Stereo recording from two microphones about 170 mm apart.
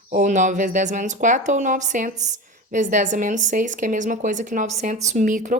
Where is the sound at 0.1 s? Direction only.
45° right (ahead or behind).